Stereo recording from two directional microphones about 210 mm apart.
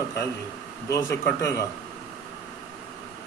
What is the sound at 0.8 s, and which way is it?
Speech, 15° left (ahead or behind).